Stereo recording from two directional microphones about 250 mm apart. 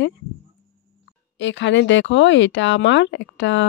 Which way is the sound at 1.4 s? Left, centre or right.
Left.